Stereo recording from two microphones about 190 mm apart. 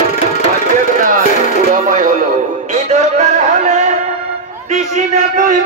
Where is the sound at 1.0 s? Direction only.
45° right (ahead or behind).